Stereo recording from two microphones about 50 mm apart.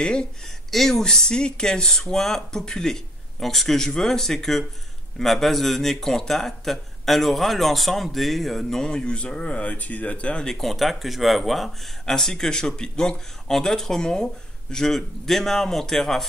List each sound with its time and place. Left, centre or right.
0.0 s speech: centre
0.7 s speech: centre; by 10.4 s left
10.4 s speech: centre